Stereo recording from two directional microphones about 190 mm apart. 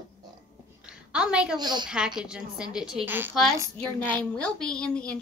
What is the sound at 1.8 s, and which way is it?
Female singing, 5° right (ahead or behind).